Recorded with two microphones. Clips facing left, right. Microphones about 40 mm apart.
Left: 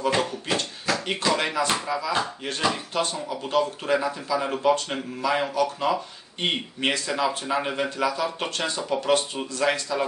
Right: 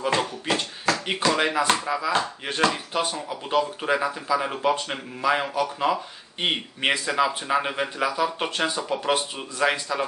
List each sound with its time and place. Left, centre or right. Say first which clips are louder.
0.2 s speech: even; centre